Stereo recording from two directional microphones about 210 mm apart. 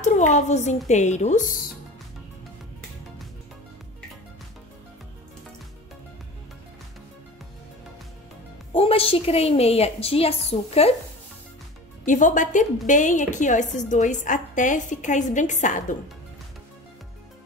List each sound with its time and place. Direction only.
0.0 s a woman's voice: 35° left (ahead or behind)
8.7 s a woman's voice: 25° left (ahead or behind)
12.0 s a woman's voice: 40° left (ahead or behind)